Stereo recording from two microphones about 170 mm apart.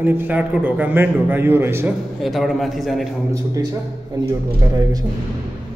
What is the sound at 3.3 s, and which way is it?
Speech, 20° right (ahead or behind).